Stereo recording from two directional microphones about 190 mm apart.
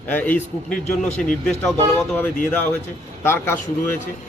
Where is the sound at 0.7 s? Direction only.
40° left (ahead or behind).